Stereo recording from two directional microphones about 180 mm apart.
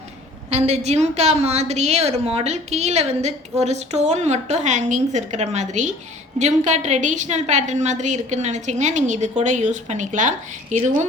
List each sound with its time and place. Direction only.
0.5 s a woman's voice: 40° right (ahead or behind)